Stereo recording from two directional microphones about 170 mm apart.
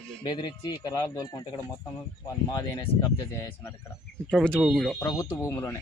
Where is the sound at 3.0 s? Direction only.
15° left (ahead or behind).